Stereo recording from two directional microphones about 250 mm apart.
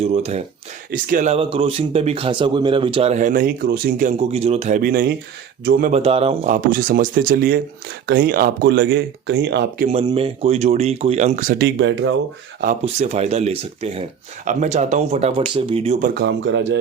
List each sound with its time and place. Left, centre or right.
0.0 s a man's voice: right
9.9 s speech: right
12.8 s speech: right
16.2 s speech: right